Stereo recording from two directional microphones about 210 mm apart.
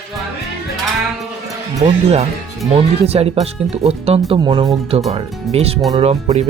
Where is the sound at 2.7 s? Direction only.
30° right (ahead or behind).